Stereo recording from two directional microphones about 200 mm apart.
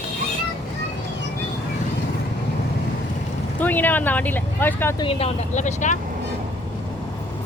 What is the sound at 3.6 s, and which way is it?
Speech, 10° left (ahead or behind).